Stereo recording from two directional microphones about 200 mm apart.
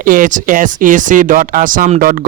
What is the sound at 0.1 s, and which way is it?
Speech, 45° right (ahead or behind).